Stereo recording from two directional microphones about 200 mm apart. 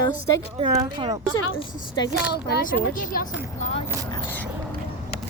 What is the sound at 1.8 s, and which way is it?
Speech, 20° left (ahead or behind).